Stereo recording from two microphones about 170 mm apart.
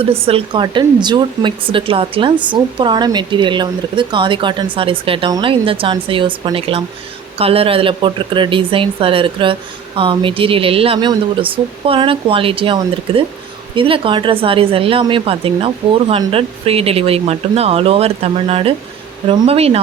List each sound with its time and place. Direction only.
0.0 s a woman's voice: 35° right (ahead or behind)